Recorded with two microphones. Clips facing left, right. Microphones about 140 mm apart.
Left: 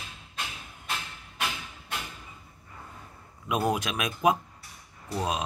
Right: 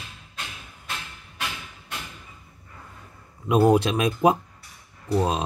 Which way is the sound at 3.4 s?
30° right (ahead or behind).